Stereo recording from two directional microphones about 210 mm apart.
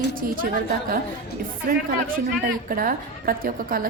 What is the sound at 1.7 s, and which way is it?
A woman's voice, 45° right (ahead or behind).